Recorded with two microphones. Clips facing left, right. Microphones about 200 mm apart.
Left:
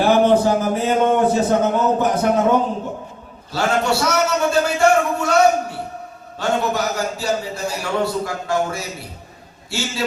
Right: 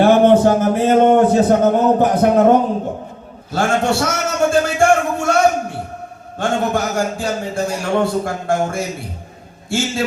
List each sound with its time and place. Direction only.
0.0 s speech: 55° right (ahead or behind)
3.5 s a sound: 50° right (ahead or behind)
6.4 s a man's voice: 50° right (ahead or behind)